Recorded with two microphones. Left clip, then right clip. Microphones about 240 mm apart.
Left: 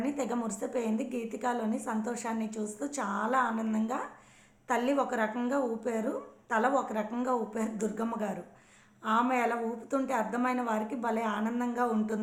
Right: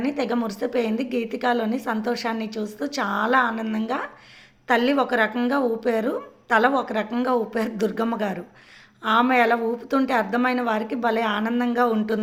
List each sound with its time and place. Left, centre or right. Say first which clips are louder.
0.0 s a woman's voice: right 8 dB; right